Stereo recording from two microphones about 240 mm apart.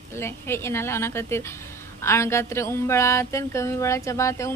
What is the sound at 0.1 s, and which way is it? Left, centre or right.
Speech, centre.